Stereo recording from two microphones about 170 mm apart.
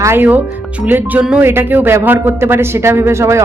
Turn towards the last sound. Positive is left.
turn(degrees=-15)  # may be behind; listen again after turning